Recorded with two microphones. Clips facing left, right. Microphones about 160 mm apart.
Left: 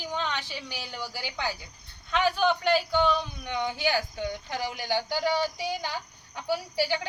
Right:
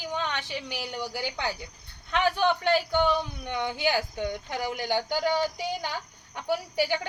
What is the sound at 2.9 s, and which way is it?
Speech, 15° right (ahead or behind).